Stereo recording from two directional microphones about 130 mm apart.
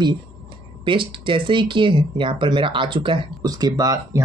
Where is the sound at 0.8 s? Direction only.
40° right (ahead or behind).